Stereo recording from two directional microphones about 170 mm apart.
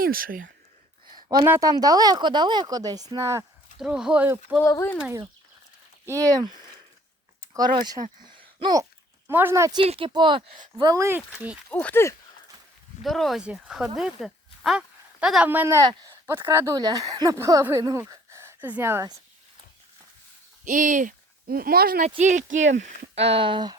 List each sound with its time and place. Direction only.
0.0 s speech: 60° right (ahead or behind)
1.1 s a sound: 25° right (ahead or behind)
1.5 s speech: 20° right (ahead or behind)
3.8 s speech: 5° right (ahead or behind)
4.6 s speech: 15° left (ahead or behind)
6.1 s speech: 20° right (ahead or behind)
7.5 s speech: 25° right (ahead or behind)
8.0 s a sound: 50° right (ahead or behind)
8.5 s a sound: 25° right (ahead or behind)
9.7 s speech: 35° right (ahead or behind); by 11.2 s 15° right (ahead or behind)
11.7 s speech: 10° left (ahead or behind)
13.0 s speech: centre (ahead or behind); by 19.1 s 15° right (ahead or behind)
20.7 s speech: 50° right (ahead or behind)
22.2 s speech: 45° right (ahead or behind); by 23.7 s 30° right (ahead or behind)